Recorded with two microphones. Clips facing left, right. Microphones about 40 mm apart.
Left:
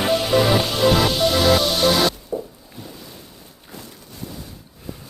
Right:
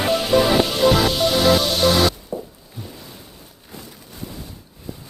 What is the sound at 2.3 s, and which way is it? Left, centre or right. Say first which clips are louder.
Music: left 2 dB; centre.